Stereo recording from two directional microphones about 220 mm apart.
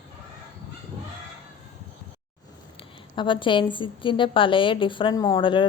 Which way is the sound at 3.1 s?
20° left (ahead or behind).